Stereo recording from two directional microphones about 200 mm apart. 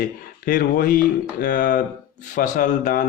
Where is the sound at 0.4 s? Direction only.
45° left (ahead or behind).